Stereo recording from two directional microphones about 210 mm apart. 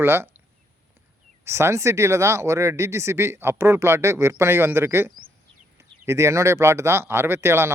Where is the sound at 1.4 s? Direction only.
15° right (ahead or behind).